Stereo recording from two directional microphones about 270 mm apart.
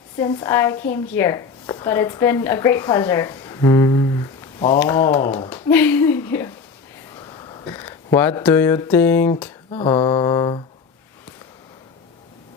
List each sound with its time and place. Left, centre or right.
0.2 s a woman's voice: centre